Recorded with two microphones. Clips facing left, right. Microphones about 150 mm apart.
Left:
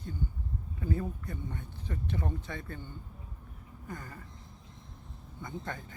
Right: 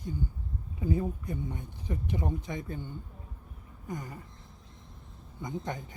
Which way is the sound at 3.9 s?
15° right (ahead or behind).